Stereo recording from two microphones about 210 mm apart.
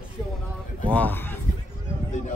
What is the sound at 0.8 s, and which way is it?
Speech, 5° left (ahead or behind).